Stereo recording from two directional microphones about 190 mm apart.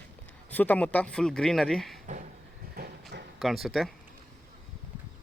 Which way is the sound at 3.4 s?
Centre (ahead or behind).